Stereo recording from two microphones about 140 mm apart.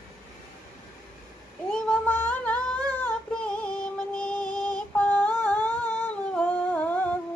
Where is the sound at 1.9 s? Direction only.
10° left (ahead or behind).